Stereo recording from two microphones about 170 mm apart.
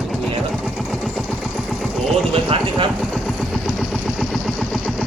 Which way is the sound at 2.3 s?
30° right (ahead or behind).